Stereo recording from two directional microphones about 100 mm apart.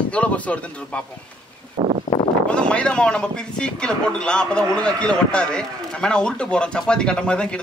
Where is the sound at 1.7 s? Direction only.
90° right.